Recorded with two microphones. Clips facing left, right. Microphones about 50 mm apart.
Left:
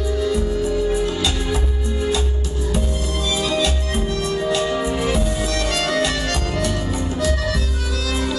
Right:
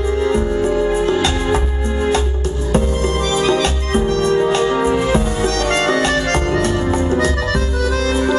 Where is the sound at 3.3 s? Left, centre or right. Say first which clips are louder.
Right 3 dB; right.